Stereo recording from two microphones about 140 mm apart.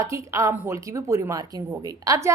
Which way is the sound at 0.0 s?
20° right (ahead or behind).